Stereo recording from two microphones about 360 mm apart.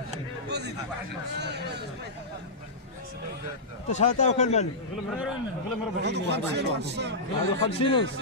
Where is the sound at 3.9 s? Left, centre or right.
Centre.